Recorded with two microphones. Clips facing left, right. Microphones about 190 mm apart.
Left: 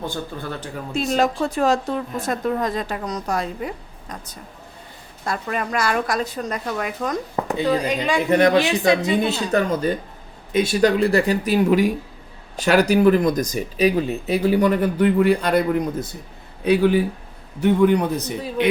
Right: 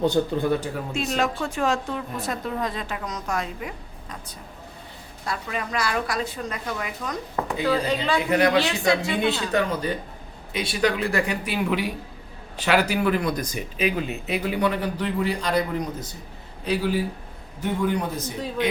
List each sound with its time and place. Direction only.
0.0 s speech: 15° right (ahead or behind)
0.9 s speech: 35° left (ahead or behind)
5.2 s speech: 50° left (ahead or behind)
7.6 s a woman's voice: 15° left (ahead or behind)
8.3 s a man's voice: 35° left (ahead or behind); by 15.6 s 55° left (ahead or behind)
16.6 s a man's voice: 60° left (ahead or behind)